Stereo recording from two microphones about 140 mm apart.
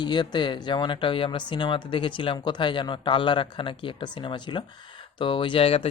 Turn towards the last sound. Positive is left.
turn(degrees=45)  # may be behind; listen again after turning